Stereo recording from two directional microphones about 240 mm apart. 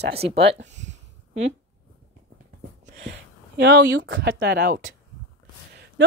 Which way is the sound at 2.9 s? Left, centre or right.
Right.